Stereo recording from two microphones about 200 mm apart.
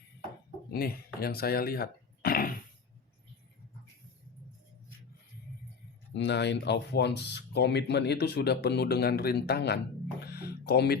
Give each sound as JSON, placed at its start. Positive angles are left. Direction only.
{"t": 0.7, "sound": "cough", "side_deg": 50}
{"t": 6.1, "sound": "speech", "side_deg": 60}